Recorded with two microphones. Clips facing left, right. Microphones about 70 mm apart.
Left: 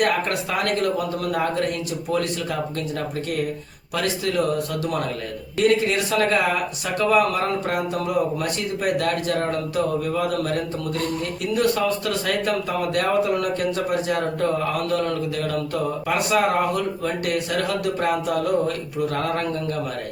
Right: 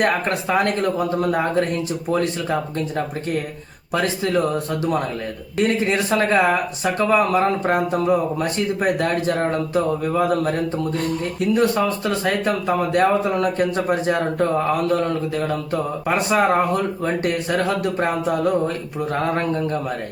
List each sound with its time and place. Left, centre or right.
0.0 s speech: right